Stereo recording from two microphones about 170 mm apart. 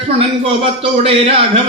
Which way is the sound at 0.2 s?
35° right (ahead or behind).